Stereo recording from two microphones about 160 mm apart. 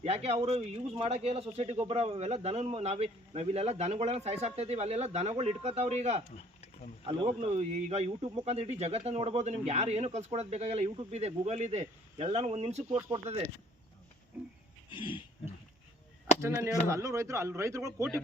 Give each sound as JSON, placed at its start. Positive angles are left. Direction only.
{"t": 0.0, "sound": "a man's voice", "side_deg": -40}
{"t": 13.0, "sound": "speech", "side_deg": -20}
{"t": 14.9, "sound": "pig", "side_deg": 30}
{"t": 16.4, "sound": "speech", "side_deg": -20}